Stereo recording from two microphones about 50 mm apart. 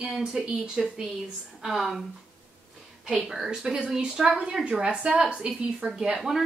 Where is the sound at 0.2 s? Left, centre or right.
Centre.